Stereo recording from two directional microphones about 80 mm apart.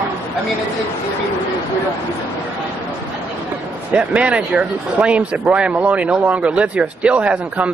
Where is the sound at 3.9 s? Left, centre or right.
Centre.